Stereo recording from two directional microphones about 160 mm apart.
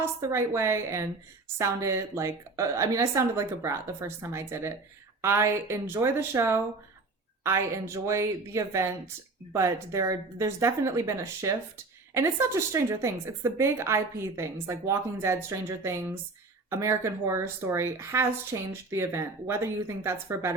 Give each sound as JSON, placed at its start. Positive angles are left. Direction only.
{"t": 0.0, "sound": "a woman's voice", "side_deg": -15}